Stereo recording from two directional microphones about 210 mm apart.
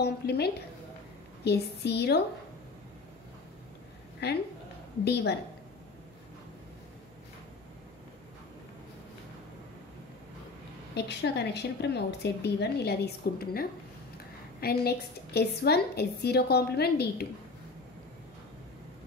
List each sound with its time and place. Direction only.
0.0 s a woman's voice: 50° left (ahead or behind)
4.2 s a woman's voice: 50° left (ahead or behind)
11.0 s a woman's voice: 55° left (ahead or behind)